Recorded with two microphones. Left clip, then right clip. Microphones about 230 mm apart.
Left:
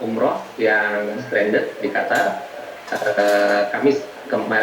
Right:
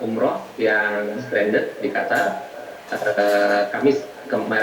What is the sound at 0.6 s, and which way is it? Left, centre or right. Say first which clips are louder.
Speech: left 1 dB; centre.